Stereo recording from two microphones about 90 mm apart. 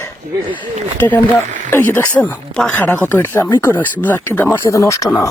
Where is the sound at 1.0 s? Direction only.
25° left (ahead or behind).